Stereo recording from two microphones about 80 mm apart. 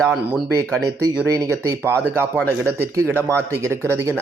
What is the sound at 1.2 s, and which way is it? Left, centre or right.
Speech, right.